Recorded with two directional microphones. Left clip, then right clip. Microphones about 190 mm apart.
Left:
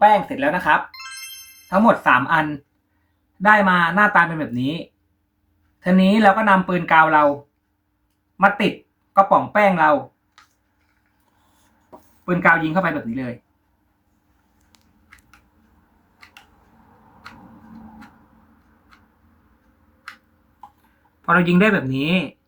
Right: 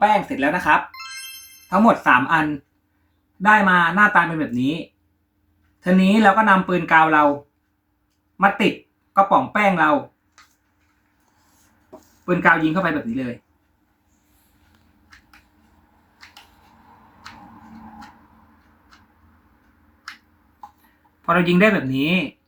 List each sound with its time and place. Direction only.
0.0 s speech: 5° left (ahead or behind)
1.6 s music: 10° left (ahead or behind)
2.0 s speech: 10° left (ahead or behind)
3.4 s speech: 10° left (ahead or behind)
5.8 s speech: 10° left (ahead or behind)
9.1 s speech: 5° left (ahead or behind)
12.2 s speech: 5° left (ahead or behind)
21.2 s speech: 20° left (ahead or behind)